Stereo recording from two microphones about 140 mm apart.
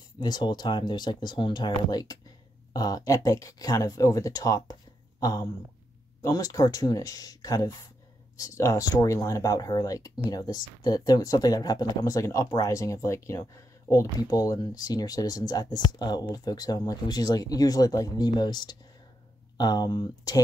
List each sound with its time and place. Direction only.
0.2 s speech: 30° left (ahead or behind)